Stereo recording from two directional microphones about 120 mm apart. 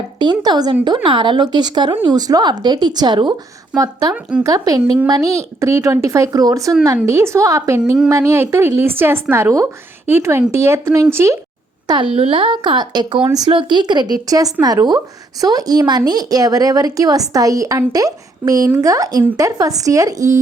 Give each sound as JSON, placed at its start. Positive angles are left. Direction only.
{"t": 0.2, "sound": "a woman's voice", "side_deg": -35}
{"t": 4.1, "sound": "a woman's voice", "side_deg": -10}
{"t": 4.4, "sound": "a woman's voice", "side_deg": -30}
{"t": 12.1, "sound": "a woman's voice", "side_deg": -50}